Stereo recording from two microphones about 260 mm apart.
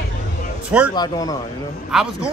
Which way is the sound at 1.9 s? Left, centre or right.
Centre.